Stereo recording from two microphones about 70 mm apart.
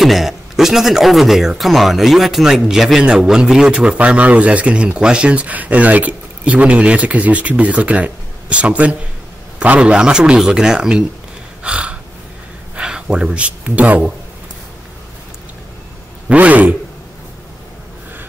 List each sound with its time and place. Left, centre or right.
0.0 s speech: centre
11.6 s gasp: centre
12.7 s speech: centre
16.3 s speech: right